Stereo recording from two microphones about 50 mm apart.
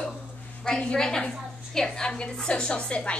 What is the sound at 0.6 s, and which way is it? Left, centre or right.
A woman's voice, centre.